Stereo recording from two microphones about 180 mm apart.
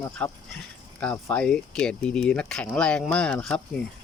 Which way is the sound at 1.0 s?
5° left (ahead or behind).